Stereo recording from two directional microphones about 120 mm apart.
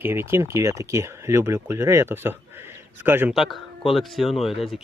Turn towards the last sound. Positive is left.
turn(degrees=0)  # may be behind; listen again after turning